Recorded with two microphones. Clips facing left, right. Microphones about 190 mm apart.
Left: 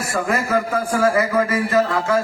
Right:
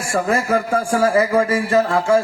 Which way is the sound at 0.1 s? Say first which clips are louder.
Right 3 dB; 30° right (ahead or behind).